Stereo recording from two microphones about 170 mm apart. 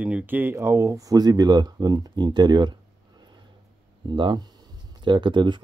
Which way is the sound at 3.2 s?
25° right (ahead or behind).